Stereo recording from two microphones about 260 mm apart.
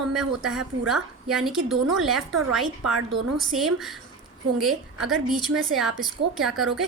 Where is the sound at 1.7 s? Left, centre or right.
Right.